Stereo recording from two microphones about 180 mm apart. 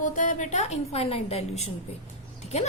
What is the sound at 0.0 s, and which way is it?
A woman's voice, 45° left (ahead or behind).